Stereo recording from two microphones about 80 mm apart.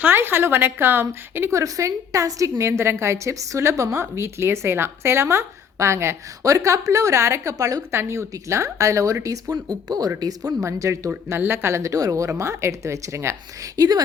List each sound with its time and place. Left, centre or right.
0.0 s a woman's voice: right
11.3 s a woman's voice: right